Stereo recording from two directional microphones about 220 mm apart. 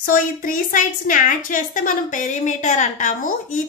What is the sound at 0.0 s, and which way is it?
A woman's voice, 40° left (ahead or behind).